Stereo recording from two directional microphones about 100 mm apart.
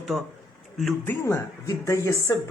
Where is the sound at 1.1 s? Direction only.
30° left (ahead or behind).